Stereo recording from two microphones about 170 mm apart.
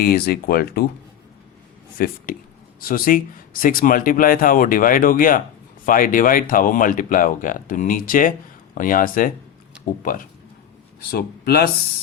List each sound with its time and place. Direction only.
0.0 s speech: 60° left (ahead or behind)
2.0 s speech: 60° left (ahead or behind)
11.1 s speech: 65° left (ahead or behind)